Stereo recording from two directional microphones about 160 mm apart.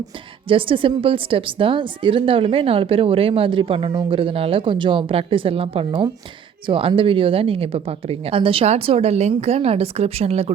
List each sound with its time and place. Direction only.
0.4 s a woman's voice: 35° right (ahead or behind)